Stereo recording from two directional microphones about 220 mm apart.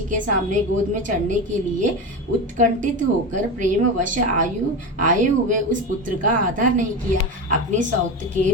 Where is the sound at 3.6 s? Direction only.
35° right (ahead or behind).